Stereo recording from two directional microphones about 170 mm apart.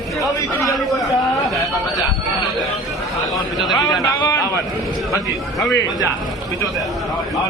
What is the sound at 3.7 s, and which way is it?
Speech, 20° left (ahead or behind).